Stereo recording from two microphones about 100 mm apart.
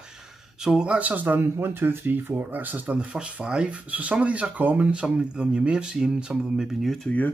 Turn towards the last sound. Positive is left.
turn(degrees=15)  # may be behind; listen again after turning